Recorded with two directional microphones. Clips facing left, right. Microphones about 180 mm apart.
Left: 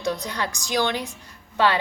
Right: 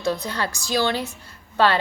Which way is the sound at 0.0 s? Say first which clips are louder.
Right 2 dB; 15° left (ahead or behind).